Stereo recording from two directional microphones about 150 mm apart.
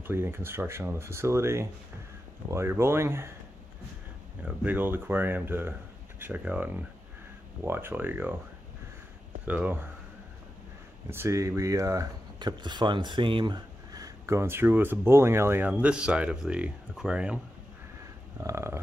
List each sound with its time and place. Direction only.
0.0 s speech: 15° right (ahead or behind)
4.5 s speech: 10° right (ahead or behind)
9.5 s speech: 10° right (ahead or behind)
11.1 s speech: 15° right (ahead or behind)
15.7 s speech: 5° right (ahead or behind)
18.4 s speech: 20° right (ahead or behind)